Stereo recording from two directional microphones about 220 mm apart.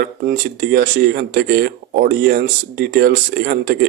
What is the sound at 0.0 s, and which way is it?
Speech, 45° right (ahead or behind).